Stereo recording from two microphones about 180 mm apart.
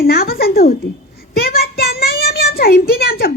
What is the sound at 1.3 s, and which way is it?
Child singing, 60° left (ahead or behind).